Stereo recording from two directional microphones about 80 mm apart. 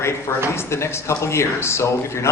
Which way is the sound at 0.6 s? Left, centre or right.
Left.